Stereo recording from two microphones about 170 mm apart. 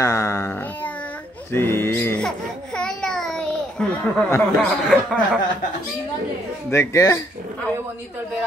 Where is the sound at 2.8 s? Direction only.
5° left (ahead or behind).